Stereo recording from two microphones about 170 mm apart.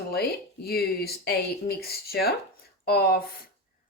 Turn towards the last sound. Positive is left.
turn(degrees=65)  # may be behind; listen again after turning